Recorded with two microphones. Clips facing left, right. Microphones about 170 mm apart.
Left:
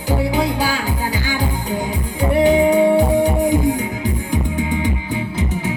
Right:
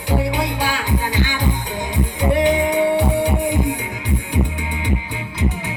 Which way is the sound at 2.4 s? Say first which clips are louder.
Left 7 dB; 35° left (ahead or behind).